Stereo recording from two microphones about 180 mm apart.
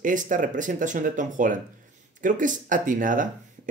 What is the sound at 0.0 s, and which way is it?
Speech, 45° right (ahead or behind).